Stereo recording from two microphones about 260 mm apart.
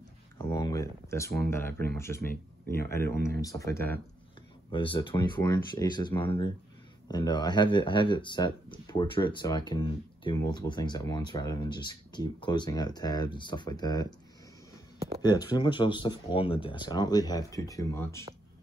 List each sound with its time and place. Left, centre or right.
0.4 s speech: centre
4.6 s speech: centre
15.2 s speech: centre